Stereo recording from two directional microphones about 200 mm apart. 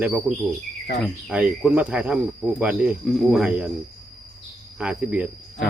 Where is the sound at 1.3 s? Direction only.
5° right (ahead or behind).